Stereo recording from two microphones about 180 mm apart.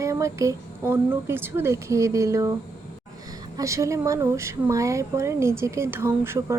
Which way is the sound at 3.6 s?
15° right (ahead or behind).